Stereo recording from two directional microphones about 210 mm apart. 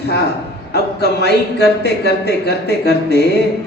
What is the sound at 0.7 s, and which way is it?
Speech, 50° left (ahead or behind).